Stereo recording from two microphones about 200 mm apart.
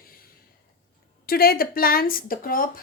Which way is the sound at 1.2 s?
50° left (ahead or behind).